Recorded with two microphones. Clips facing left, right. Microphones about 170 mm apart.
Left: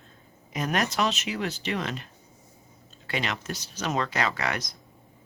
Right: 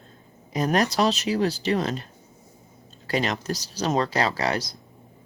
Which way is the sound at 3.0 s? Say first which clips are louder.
Right 6 dB; 40° right (ahead or behind).